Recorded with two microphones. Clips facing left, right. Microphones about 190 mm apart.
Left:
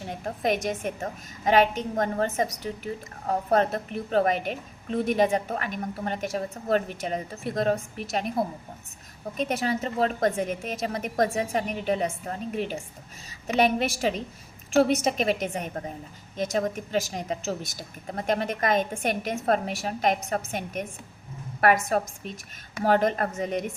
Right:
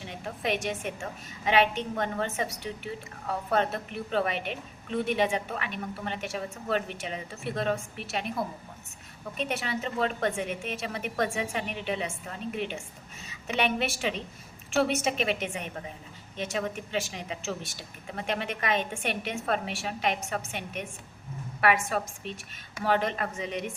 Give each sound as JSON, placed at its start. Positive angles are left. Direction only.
{"t": 0.0, "sound": "a woman's voice", "side_deg": 45}